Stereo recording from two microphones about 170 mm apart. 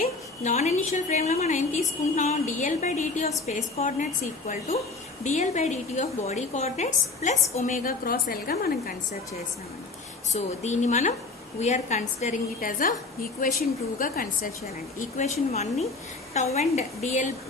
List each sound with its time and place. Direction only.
0.0 s a woman's voice: 40° left (ahead or behind); by 9.0 s 60° left (ahead or behind)
10.3 s a woman's voice: 45° left (ahead or behind)
14.9 s a woman's voice: 40° left (ahead or behind)